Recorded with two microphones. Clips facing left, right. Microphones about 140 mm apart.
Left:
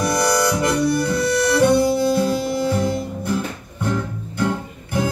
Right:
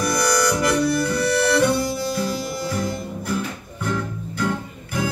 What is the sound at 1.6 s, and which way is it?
Harmonica, 25° left (ahead or behind).